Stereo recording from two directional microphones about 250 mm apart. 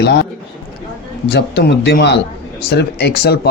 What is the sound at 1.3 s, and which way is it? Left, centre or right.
Speech, left.